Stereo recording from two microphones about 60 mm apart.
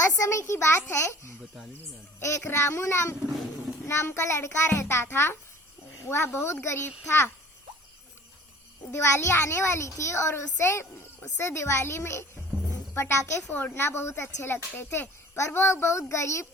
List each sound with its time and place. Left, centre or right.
0.0 s a child's voice: left
8.9 s a child's voice: left
13.5 s speech: left
14.8 s a child's voice: left
15.4 s a child's voice: left